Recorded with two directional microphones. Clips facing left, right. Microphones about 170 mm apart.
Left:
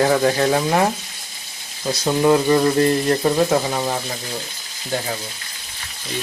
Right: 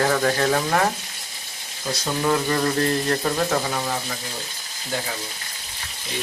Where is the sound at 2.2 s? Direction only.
20° left (ahead or behind).